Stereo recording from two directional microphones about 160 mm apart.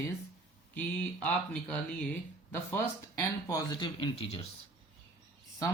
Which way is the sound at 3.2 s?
20° left (ahead or behind).